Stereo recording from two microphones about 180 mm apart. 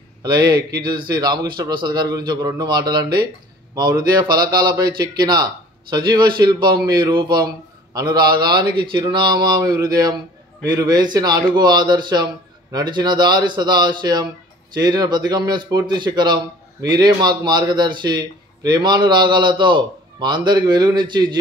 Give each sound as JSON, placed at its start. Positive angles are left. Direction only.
{"t": 0.2, "sound": "a man's voice", "side_deg": -25}